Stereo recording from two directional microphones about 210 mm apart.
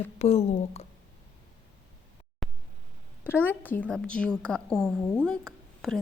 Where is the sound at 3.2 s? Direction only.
10° left (ahead or behind).